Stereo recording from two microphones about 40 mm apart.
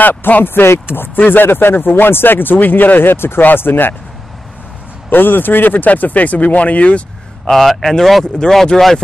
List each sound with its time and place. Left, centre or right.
0.4 s speech: left
5.1 s speech: left
7.4 s speech: centre